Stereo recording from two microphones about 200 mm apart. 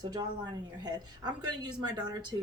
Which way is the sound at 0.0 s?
20° right (ahead or behind).